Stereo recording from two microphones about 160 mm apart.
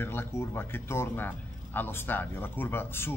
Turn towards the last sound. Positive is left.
turn(degrees=15)  # may be behind; listen again after turning